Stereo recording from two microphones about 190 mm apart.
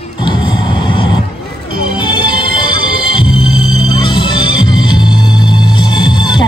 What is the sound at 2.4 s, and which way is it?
Music, 25° left (ahead or behind).